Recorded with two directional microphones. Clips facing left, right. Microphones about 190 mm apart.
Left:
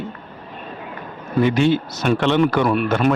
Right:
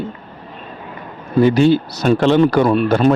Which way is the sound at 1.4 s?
35° right (ahead or behind).